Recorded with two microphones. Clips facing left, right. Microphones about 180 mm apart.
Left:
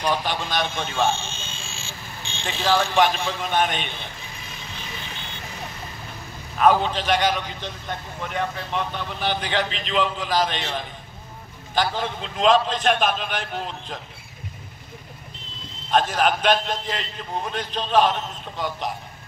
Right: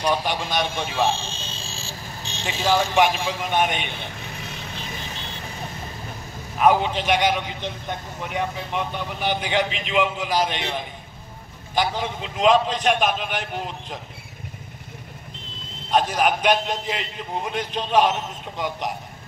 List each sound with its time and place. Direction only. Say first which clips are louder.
0.0 s a man's voice: right 1 dB; 15° right (ahead or behind)
1.1 s a sound: right 1 dB; 35° right (ahead or behind)
2.6 s a man's voice: right 1 dB; 10° right (ahead or behind)
6.6 s a man's voice: even; 15° right (ahead or behind)
15.9 s a man's voice: even; 10° right (ahead or behind)